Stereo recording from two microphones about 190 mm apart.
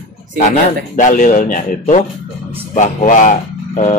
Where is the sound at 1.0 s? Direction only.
40° left (ahead or behind).